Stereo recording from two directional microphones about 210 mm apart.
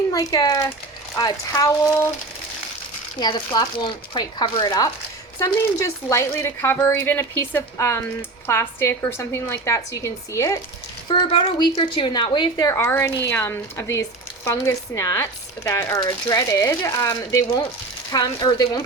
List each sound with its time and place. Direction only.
0.1 s speech: 15° left (ahead or behind)
3.2 s speech: 20° left (ahead or behind)